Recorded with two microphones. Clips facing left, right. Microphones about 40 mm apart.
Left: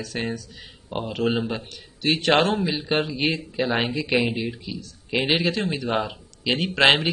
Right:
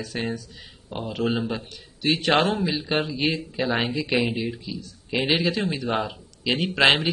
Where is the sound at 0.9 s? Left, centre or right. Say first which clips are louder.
Left 3 dB; left.